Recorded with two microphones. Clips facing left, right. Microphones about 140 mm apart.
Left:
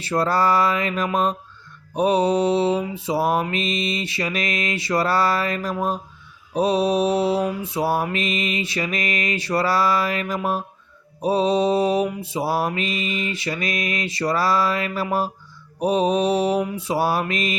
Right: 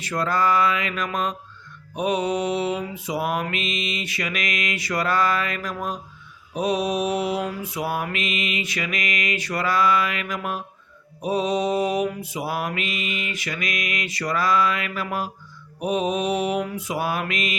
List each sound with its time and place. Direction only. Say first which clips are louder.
0.0 s mantra: left 3 dB; 30° left (ahead or behind)